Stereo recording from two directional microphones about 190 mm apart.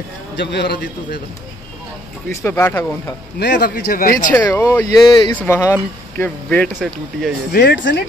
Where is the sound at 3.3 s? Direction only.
65° left (ahead or behind).